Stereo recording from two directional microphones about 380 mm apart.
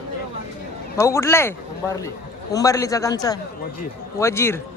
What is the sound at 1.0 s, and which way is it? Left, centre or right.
Speech, centre.